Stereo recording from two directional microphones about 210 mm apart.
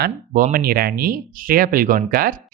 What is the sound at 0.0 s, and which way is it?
Speech, 45° right (ahead or behind).